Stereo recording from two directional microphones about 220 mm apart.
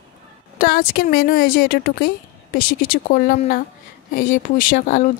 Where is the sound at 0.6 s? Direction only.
40° left (ahead or behind).